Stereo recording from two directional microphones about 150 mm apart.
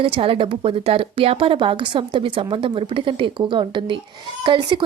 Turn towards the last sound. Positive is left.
turn(degrees=-30)  # may be behind; listen again after turning